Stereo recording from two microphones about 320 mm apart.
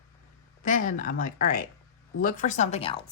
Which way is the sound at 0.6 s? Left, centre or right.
Left.